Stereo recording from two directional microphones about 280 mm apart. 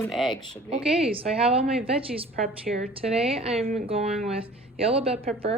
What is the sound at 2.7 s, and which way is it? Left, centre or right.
Speech, right.